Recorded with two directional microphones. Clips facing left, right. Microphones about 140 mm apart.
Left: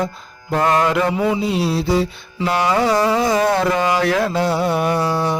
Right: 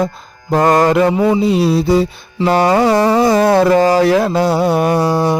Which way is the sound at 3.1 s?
35° right (ahead or behind).